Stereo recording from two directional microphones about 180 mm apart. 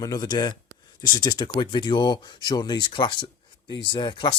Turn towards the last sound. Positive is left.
turn(degrees=25)  # may be behind; listen again after turning